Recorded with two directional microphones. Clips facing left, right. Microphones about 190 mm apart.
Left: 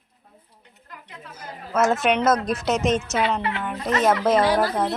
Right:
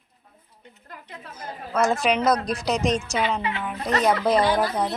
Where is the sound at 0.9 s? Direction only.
35° right (ahead or behind).